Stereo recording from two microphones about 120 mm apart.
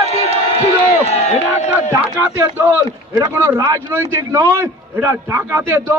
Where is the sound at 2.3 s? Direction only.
15° right (ahead or behind).